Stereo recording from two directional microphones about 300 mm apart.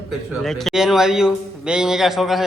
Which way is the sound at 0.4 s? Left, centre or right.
Centre.